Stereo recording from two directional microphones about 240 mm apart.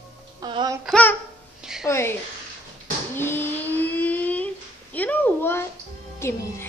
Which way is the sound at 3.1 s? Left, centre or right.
Centre.